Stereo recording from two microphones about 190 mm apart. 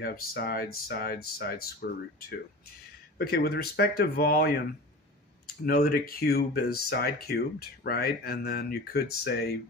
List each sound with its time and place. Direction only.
0.0 s speech: 50° left (ahead or behind)
5.7 s speech: 50° left (ahead or behind)